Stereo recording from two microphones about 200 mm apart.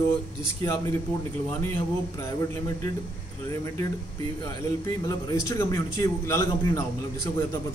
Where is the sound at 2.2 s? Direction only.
15° left (ahead or behind).